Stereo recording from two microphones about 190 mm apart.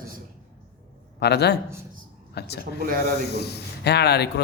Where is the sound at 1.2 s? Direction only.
60° left (ahead or behind).